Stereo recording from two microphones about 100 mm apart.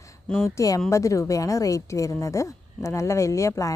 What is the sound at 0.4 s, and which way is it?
Speech, 30° left (ahead or behind).